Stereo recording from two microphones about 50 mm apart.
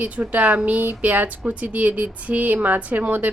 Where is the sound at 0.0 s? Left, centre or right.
Right.